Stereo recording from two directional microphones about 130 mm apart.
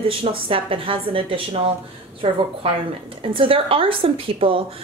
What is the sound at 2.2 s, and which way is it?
A woman's voice, 55° right (ahead or behind).